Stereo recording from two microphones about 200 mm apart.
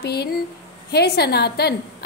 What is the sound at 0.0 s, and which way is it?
A woman's voice, 55° left (ahead or behind).